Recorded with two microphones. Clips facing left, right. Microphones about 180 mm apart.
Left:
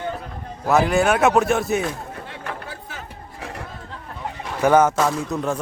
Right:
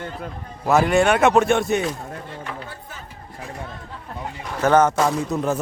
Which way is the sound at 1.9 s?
65° left (ahead or behind).